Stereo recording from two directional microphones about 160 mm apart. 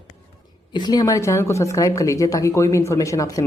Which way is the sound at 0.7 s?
25° left (ahead or behind).